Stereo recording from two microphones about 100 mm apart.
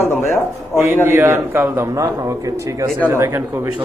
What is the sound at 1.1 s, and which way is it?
Speech, 25° right (ahead or behind).